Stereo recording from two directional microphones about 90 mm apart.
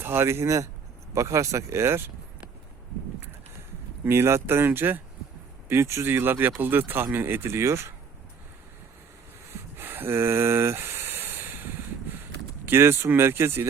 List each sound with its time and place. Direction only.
0.0 s speech: 25° right (ahead or behind)
4.0 s speech: 25° right (ahead or behind)
9.7 s a sound: 25° right (ahead or behind)
12.6 s speech: 25° right (ahead or behind)